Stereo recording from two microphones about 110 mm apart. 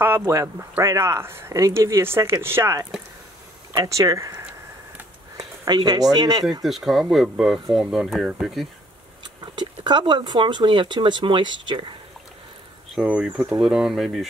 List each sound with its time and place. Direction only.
0.3 s speech: 25° right (ahead or behind)
6.6 s speech: centre (ahead or behind)
9.2 s speech: 45° right (ahead or behind)
13.0 s speech: 15° right (ahead or behind)